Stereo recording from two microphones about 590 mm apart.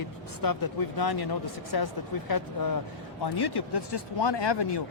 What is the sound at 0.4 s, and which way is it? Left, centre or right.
Speech, left.